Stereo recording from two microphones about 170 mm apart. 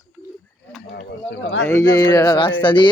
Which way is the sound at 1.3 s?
90° left.